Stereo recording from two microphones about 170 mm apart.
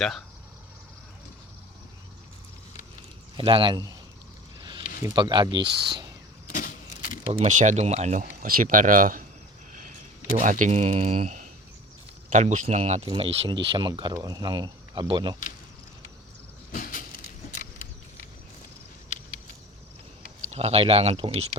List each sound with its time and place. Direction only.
3.3 s speech: 30° right (ahead or behind)
5.1 s speech: 25° right (ahead or behind)
6.5 s vehicle: 55° left (ahead or behind)
7.3 s speech: 40° right (ahead or behind)
10.4 s speech: 50° right (ahead or behind); by 15.4 s 25° right (ahead or behind)
16.7 s a sound: 50° left (ahead or behind)
20.5 s speech: 40° right (ahead or behind)